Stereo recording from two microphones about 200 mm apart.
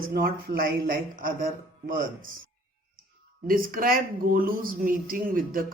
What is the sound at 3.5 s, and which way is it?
Speech, 45° right (ahead or behind).